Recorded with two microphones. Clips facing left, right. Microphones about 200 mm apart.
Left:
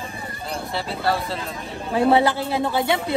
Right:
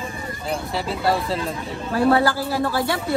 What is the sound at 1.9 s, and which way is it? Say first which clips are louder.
A man's voice: even; 20° left (ahead or behind).